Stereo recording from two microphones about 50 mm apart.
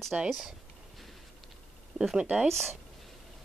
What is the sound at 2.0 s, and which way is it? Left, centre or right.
Speech, centre.